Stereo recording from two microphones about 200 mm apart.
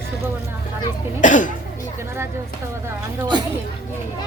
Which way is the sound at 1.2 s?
40° left (ahead or behind).